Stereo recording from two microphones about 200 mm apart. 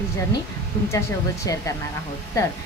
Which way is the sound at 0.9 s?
15° left (ahead or behind).